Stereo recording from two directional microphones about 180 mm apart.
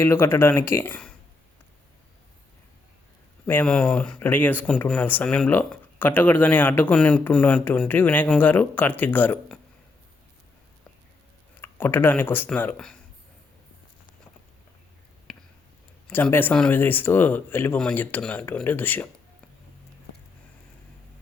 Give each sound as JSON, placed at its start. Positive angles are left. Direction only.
{"t": 0.0, "sound": "speech", "side_deg": 15}
{"t": 3.4, "sound": "speech", "side_deg": 10}
{"t": 11.6, "sound": "speech", "side_deg": 10}
{"t": 15.3, "sound": "a sound", "side_deg": 5}
{"t": 16.0, "sound": "speech", "side_deg": 10}